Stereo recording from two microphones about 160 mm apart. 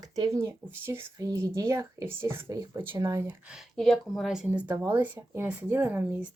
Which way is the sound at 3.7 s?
Centre (ahead or behind).